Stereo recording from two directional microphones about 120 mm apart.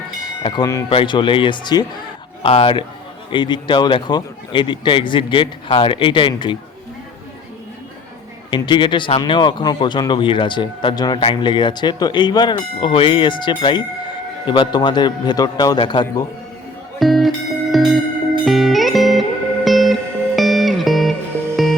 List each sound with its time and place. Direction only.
0.2 s tubular bells: 35° left (ahead or behind)
0.9 s a man's voice: 45° left (ahead or behind)
8.4 s speech: 40° left (ahead or behind)
17.0 s music: centre (ahead or behind)